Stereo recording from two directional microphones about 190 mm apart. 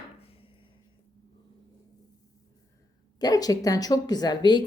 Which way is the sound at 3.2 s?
20° left (ahead or behind).